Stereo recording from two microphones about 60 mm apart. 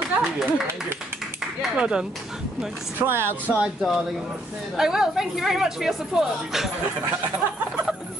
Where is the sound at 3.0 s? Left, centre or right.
Right.